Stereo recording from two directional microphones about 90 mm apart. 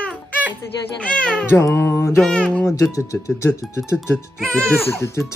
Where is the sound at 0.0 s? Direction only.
15° left (ahead or behind).